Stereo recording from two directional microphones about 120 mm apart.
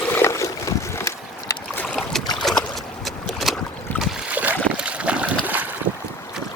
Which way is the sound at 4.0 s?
15° right (ahead or behind).